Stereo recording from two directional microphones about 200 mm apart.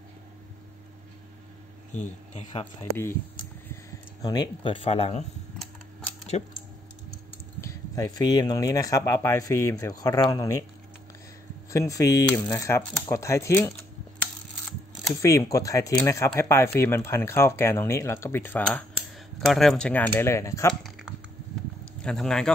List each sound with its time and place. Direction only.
1.9 s speech: 35° left (ahead or behind)
4.2 s speech: 20° left (ahead or behind)
6.3 s speech: 30° left (ahead or behind)
7.6 s speech: 15° left (ahead or behind)
11.7 s speech: 15° left (ahead or behind)
15.1 s speech: 15° left (ahead or behind)
22.0 s speech: centre (ahead or behind)